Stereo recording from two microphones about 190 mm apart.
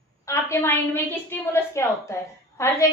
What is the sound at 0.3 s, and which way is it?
A woman's voice, 15° left (ahead or behind).